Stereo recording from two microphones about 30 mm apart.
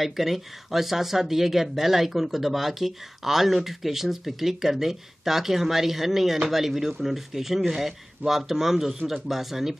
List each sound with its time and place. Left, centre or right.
0.0 s speech: centre